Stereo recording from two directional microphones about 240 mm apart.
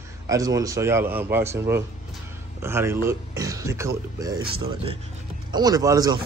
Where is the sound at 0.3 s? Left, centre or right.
Centre.